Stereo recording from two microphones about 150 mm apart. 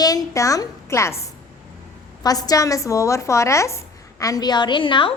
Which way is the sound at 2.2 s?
25° left (ahead or behind).